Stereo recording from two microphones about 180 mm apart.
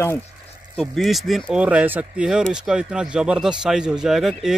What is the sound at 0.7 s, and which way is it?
Speech, centre (ahead or behind).